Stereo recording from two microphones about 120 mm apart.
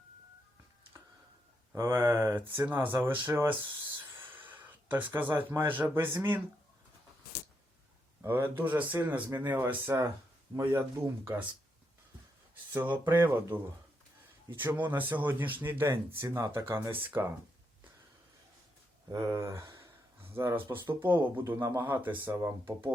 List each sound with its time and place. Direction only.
1.7 s speech: 20° right (ahead or behind)
2.6 s a sound: 20° right (ahead or behind)
5.4 s speech: 15° right (ahead or behind)
8.2 s speech: 20° right (ahead or behind)
12.7 s speech: 15° right (ahead or behind)
14.8 s speech: 15° right (ahead or behind)
19.3 s speech: 25° right (ahead or behind)